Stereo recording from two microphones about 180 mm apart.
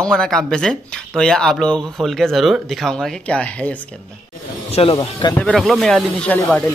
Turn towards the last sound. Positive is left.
turn(degrees=10)  # may be behind; listen again after turning